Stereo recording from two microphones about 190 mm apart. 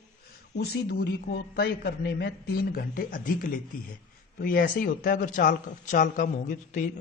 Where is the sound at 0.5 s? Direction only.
55° left (ahead or behind).